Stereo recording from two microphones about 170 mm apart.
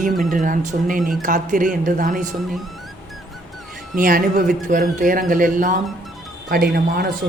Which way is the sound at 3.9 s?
55° right (ahead or behind).